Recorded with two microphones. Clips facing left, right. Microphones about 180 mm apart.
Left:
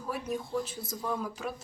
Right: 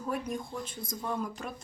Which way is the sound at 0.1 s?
5° left (ahead or behind).